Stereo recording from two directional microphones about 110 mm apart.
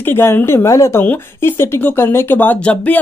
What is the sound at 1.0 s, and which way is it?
Speech, 20° left (ahead or behind).